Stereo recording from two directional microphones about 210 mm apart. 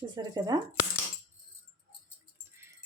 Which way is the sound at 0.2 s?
20° right (ahead or behind).